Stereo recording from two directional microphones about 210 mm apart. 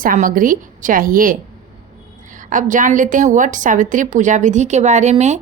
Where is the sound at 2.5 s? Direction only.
40° right (ahead or behind).